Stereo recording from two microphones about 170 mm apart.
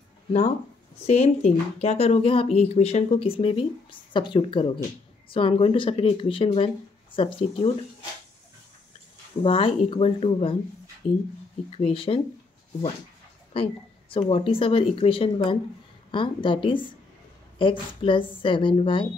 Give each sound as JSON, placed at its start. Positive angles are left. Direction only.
{"t": 1.0, "sound": "speech", "side_deg": 40}
{"t": 9.4, "sound": "speech", "side_deg": 35}
{"t": 11.7, "sound": "speech", "side_deg": 35}
{"t": 13.5, "sound": "a woman's voice", "side_deg": 30}